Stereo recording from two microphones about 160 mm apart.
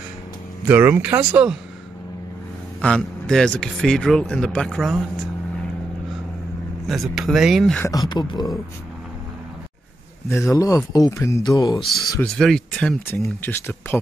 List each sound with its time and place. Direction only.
0.7 s a man's voice: 10° right (ahead or behind)
2.8 s speech: 5° left (ahead or behind)
6.9 s speech: centre (ahead or behind)
7.8 s speech: 20° left (ahead or behind)
10.2 s speech: 15° left (ahead or behind)
11.8 s speech: centre (ahead or behind)